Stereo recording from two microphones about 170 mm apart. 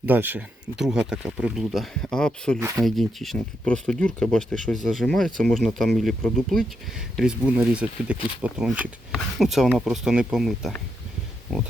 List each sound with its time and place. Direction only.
0.0 s speech: 10° right (ahead or behind); by 2.6 s 5° left (ahead or behind)
2.6 s speech: 15° right (ahead or behind)
2.8 s speech: centre (ahead or behind)